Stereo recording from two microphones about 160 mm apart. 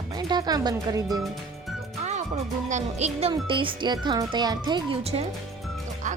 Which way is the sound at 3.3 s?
30° right (ahead or behind).